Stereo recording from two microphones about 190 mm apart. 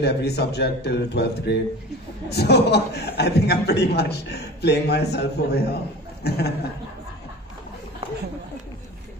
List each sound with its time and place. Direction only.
0.0 s a man's voice: 60° left (ahead or behind)